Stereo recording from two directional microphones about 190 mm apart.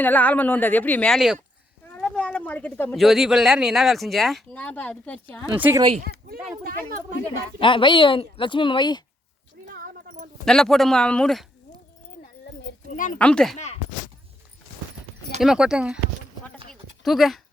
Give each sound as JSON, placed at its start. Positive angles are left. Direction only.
{"t": 0.0, "sound": "speech", "side_deg": 10}
{"t": 5.5, "sound": "speech", "side_deg": -10}
{"t": 6.1, "sound": "speech", "side_deg": -50}
{"t": 7.6, "sound": "a woman's voice", "side_deg": 25}
{"t": 9.6, "sound": "a sound", "side_deg": -50}
{"t": 10.4, "sound": "speech", "side_deg": 5}
{"t": 12.2, "sound": "a sound", "side_deg": 65}
{"t": 12.9, "sound": "speech", "side_deg": 40}
{"t": 13.1, "sound": "speech", "side_deg": 5}
{"t": 15.4, "sound": "speech", "side_deg": -5}
{"t": 17.0, "sound": "speech", "side_deg": 0}